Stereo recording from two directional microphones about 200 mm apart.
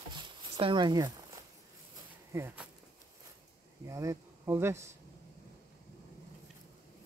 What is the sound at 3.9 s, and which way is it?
Speech, 15° right (ahead or behind).